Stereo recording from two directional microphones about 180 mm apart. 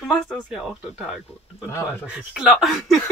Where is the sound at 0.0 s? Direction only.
Centre (ahead or behind).